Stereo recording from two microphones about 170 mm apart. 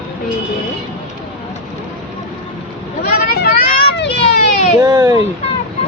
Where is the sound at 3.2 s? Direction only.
65° left (ahead or behind).